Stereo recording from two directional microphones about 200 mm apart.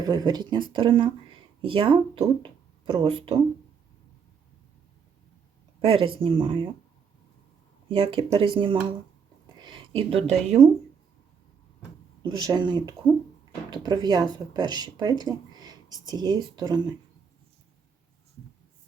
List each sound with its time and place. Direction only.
0.0 s speech: 20° right (ahead or behind)
5.8 s speech: 25° right (ahead or behind)
7.9 s speech: 25° right (ahead or behind)
12.2 s speech: 20° right (ahead or behind)